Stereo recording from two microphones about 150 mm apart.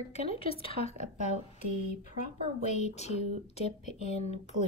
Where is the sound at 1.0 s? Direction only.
55° right (ahead or behind).